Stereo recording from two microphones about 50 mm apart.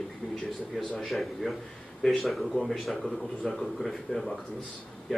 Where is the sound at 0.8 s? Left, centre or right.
Centre.